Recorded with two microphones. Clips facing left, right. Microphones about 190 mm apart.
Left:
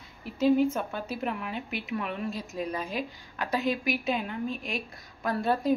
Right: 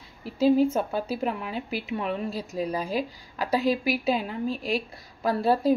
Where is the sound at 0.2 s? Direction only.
30° right (ahead or behind).